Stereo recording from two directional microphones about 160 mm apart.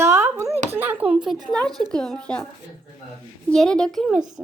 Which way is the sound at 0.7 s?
10° right (ahead or behind).